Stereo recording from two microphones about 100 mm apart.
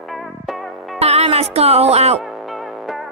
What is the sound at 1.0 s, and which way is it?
Speech, 90° right.